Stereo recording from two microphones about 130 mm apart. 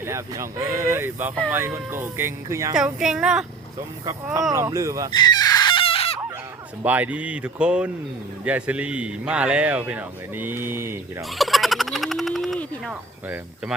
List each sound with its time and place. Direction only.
0.0 s speech: 20° right (ahead or behind)
2.7 s speech: 5° right (ahead or behind)
4.5 s speech: 20° right (ahead or behind)
5.1 s chicken: 30° left (ahead or behind); by 6.1 s 45° left (ahead or behind)
6.8 s a man's voice: 10° right (ahead or behind)
11.2 s fowl: centre (ahead or behind)